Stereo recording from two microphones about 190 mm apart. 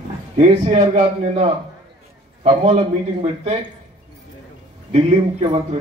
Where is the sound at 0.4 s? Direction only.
35° right (ahead or behind).